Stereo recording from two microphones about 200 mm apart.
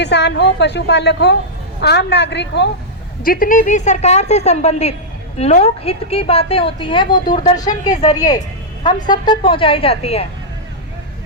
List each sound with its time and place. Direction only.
0.0 s a woman's voice: 60° left (ahead or behind)
3.2 s a woman's voice: 45° left (ahead or behind)